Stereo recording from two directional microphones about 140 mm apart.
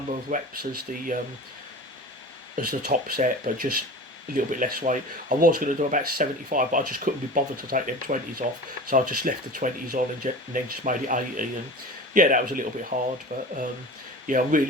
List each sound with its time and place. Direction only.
0.3 s speech: 75° right (ahead or behind)
2.6 s speech: 90° right
4.4 s speech: 70° right (ahead or behind)
10.5 s speech: 70° right (ahead or behind)
12.9 s speech: 65° right (ahead or behind)
14.3 s speech: 75° right (ahead or behind)